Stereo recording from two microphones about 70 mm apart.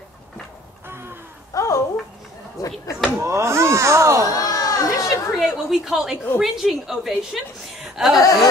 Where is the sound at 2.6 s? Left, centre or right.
Left.